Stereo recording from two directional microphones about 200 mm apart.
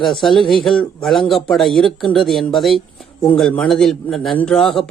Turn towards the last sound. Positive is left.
turn(degrees=0)  # may be behind; listen again after turning